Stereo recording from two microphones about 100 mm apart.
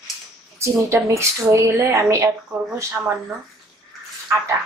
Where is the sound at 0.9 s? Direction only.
25° right (ahead or behind).